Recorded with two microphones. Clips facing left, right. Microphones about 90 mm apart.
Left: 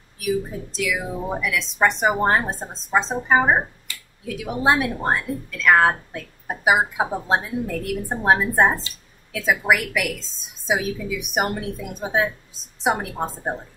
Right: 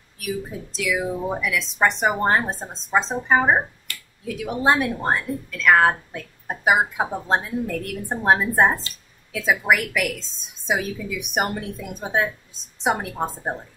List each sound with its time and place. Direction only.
0.2 s speech: centre (ahead or behind)